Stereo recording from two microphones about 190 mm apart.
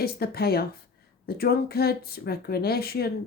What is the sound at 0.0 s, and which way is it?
Speech, 55° left (ahead or behind).